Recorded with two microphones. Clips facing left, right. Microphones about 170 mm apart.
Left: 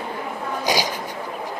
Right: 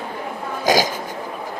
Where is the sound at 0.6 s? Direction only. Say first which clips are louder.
Right 6 dB; 45° right (ahead or behind).